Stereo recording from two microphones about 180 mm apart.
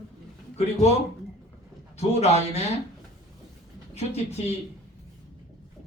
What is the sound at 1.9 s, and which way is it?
Speech, 35° left (ahead or behind).